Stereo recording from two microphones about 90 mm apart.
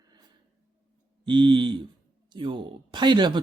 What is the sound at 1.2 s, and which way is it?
Speech, 65° right (ahead or behind).